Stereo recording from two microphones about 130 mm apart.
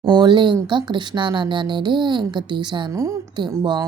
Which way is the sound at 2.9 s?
25° right (ahead or behind).